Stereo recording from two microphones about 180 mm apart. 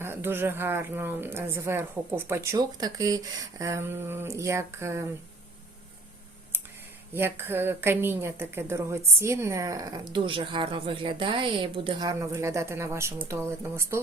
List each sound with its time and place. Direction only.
0.0 s a woman's voice: 10° right (ahead or behind)
7.1 s a woman's voice: 10° right (ahead or behind)